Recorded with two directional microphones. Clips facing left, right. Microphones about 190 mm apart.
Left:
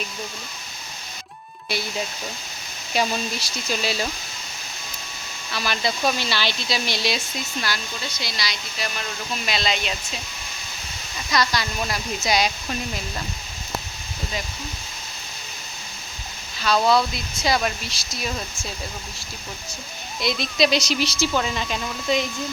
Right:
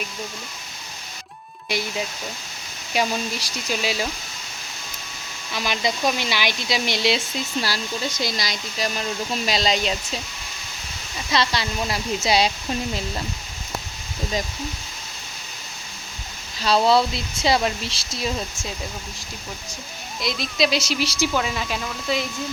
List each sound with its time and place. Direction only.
2.9 s speech: 10° right (ahead or behind)
5.5 s speech: 15° right (ahead or behind)
8.2 s speech: 45° right (ahead or behind)
9.0 s speech: 35° right (ahead or behind)
11.3 s speech: 25° right (ahead or behind)
16.6 s speech: 30° right (ahead or behind)
20.2 s speech: centre (ahead or behind)